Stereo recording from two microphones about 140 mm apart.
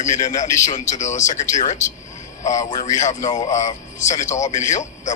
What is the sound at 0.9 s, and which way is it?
Speech, 60° left (ahead or behind).